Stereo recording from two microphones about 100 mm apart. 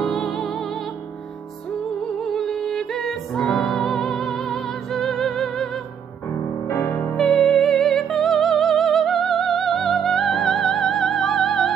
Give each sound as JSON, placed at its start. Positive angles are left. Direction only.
{"t": 0.0, "sound": "music", "side_deg": 5}
{"t": 2.2, "sound": "music", "side_deg": 5}
{"t": 6.7, "sound": "music", "side_deg": 30}
{"t": 7.2, "sound": "music", "side_deg": 5}